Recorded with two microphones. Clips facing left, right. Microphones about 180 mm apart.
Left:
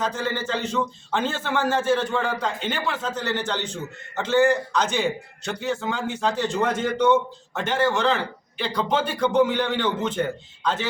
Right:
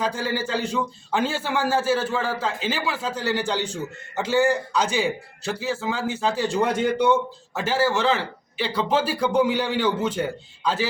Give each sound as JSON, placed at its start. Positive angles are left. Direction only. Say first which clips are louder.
{"t": 0.0, "sound": "a man's voice", "louder": "right 1 dB", "side_deg": -10}